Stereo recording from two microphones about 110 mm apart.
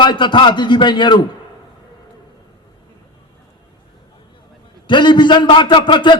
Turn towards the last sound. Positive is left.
turn(degrees=45)  # may be behind; listen again after turning